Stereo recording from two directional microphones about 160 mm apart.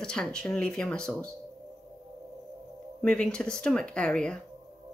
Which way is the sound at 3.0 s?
5° left (ahead or behind).